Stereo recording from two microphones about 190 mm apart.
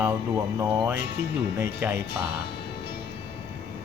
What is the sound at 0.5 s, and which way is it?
Speech, 20° right (ahead or behind).